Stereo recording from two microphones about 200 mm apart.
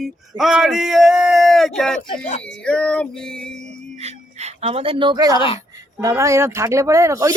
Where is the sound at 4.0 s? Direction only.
30° right (ahead or behind).